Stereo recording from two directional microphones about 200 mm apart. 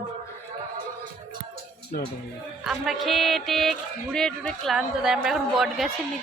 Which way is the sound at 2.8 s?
Centre (ahead or behind).